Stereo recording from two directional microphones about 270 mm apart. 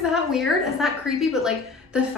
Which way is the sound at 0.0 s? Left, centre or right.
Centre.